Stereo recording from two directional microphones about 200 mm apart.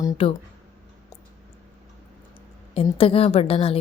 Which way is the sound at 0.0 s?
25° left (ahead or behind).